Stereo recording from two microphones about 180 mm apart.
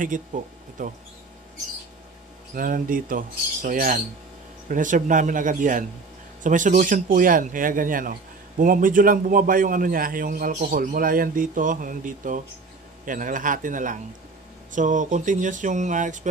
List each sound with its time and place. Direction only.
0.0 s speech: 45° right (ahead or behind)
2.5 s a man's voice: 50° right (ahead or behind)